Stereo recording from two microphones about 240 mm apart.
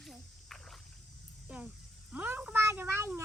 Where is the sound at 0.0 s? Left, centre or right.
Centre.